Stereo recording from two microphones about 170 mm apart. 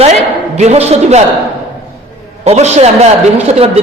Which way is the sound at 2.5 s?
40° right (ahead or behind).